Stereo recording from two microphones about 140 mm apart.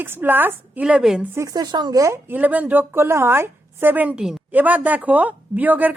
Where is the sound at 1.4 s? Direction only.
25° right (ahead or behind).